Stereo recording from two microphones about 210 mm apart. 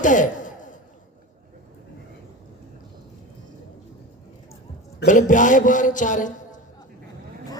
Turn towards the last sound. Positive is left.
turn(degrees=35)  # may be behind; listen again after turning